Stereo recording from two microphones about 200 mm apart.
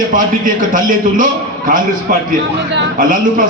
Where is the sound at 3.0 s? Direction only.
40° right (ahead or behind).